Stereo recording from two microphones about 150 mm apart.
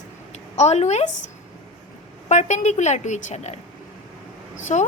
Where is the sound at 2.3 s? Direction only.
50° left (ahead or behind).